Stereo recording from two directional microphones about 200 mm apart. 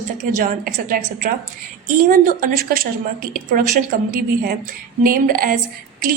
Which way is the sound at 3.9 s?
45° right (ahead or behind).